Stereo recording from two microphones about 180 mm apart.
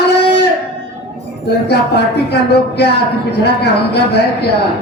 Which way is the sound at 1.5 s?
65° left (ahead or behind).